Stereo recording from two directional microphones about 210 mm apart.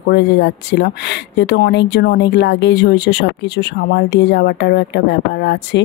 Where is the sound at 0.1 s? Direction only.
55° left (ahead or behind).